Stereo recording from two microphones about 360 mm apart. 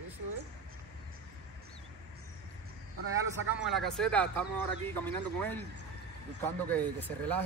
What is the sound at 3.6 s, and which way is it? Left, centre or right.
Speech, centre.